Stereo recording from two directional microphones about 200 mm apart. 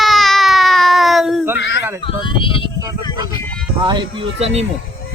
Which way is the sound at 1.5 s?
60° left (ahead or behind).